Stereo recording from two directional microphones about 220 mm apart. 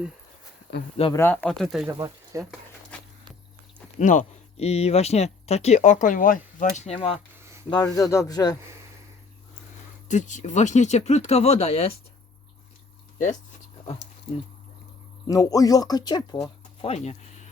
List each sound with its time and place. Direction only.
1.1 s speech: 10° left (ahead or behind)
1.9 s speech: 15° right (ahead or behind)
4.0 s speech: 35° left (ahead or behind)
7.7 s speech: 15° left (ahead or behind)
10.1 s speech: 35° left (ahead or behind)
15.3 s speech: 15° left (ahead or behind); by 17.5 s 30° left (ahead or behind)